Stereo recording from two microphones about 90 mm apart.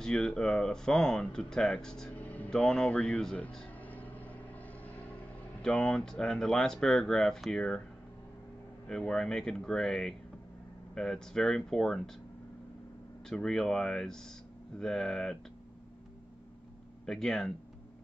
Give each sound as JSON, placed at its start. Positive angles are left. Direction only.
{"t": 0.0, "sound": "speech", "side_deg": 5}
{"t": 2.1, "sound": "a sound", "side_deg": 20}
{"t": 2.5, "sound": "speech", "side_deg": 10}
{"t": 3.8, "sound": "vehicle", "side_deg": 20}
{"t": 5.6, "sound": "speech", "side_deg": 10}
{"t": 8.8, "sound": "speech", "side_deg": 5}
{"t": 13.3, "sound": "speech", "side_deg": 5}
{"t": 17.0, "sound": "speech", "side_deg": 5}